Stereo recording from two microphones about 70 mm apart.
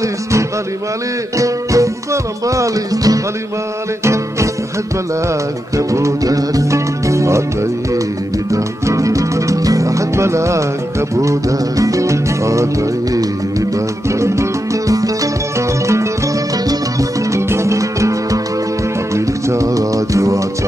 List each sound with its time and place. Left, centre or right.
1.4 s music: right
4.0 s music: right
5.8 s music: right
8.5 s music: right
14.2 s music: right
17.3 s music: right